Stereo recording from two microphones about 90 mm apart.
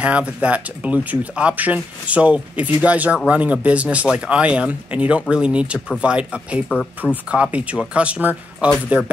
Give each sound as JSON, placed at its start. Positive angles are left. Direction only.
{"t": 0.0, "sound": "speech", "side_deg": -15}
{"t": 7.0, "sound": "speech", "side_deg": 10}
{"t": 7.5, "sound": "speech", "side_deg": -15}